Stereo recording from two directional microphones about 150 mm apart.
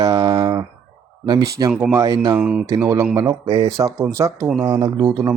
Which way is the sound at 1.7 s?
10° right (ahead or behind).